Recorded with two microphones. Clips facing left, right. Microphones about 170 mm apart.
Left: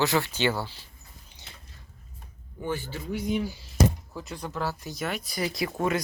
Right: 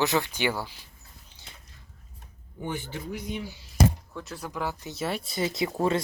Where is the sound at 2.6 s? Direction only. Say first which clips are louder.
Left 2 dB; 20° right (ahead or behind).